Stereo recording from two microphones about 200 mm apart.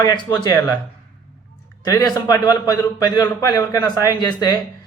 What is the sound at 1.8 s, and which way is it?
A man's voice, 20° left (ahead or behind).